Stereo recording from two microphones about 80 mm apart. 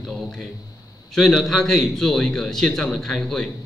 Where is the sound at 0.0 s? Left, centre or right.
Centre.